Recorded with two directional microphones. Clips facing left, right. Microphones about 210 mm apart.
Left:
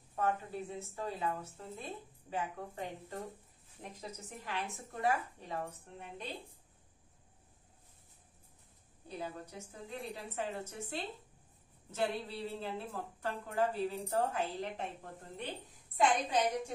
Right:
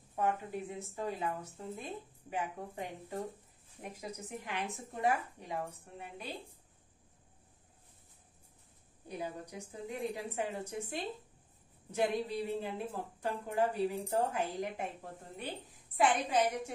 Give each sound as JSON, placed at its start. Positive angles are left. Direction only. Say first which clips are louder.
{"t": 0.1, "sound": "a woman's voice", "louder": "right 1 dB", "side_deg": -15}
{"t": 9.1, "sound": "a woman's voice", "louder": "right 2 dB", "side_deg": -15}
{"t": 16.0, "sound": "a woman's voice", "louder": "right 1 dB", "side_deg": -10}